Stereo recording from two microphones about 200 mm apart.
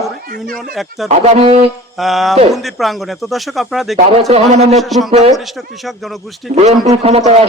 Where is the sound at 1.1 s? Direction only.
30° right (ahead or behind).